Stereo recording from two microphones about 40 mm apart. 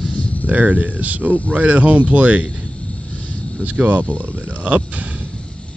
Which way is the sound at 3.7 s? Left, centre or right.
Right.